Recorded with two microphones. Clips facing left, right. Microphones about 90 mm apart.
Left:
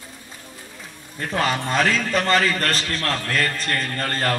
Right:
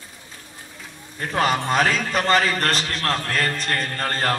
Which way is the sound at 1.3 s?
35° right (ahead or behind).